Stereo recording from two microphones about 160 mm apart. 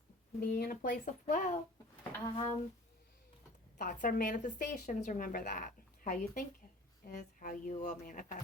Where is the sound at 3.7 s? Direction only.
55° left (ahead or behind).